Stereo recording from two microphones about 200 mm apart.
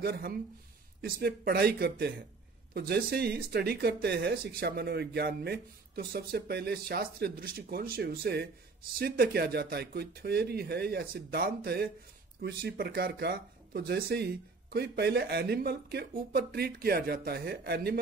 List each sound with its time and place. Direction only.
0.0 s speech: 50° right (ahead or behind)